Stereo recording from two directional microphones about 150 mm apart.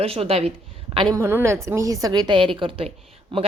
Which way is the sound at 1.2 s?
15° right (ahead or behind).